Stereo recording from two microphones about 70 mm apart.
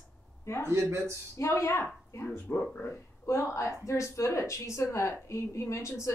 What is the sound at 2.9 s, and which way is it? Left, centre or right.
A woman's voice, left.